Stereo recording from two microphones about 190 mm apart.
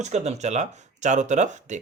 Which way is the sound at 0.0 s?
35° right (ahead or behind).